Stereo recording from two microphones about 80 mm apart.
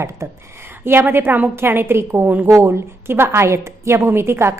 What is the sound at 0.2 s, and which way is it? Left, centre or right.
Speech, right.